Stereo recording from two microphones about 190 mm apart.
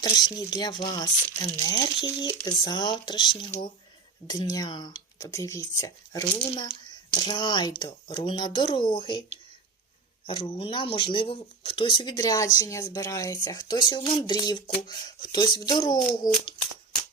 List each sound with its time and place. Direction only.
0.0 s speech: 20° left (ahead or behind)
10.2 s speech: 25° left (ahead or behind)